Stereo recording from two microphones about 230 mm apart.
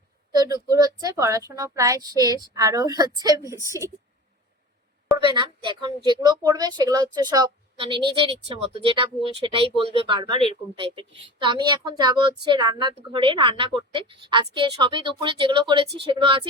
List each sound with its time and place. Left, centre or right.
0.3 s speech: centre
5.3 s a woman's voice: centre